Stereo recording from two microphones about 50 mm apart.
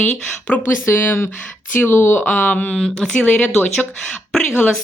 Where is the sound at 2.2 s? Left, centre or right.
Left.